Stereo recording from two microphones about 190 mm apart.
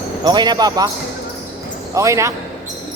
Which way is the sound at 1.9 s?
15° right (ahead or behind).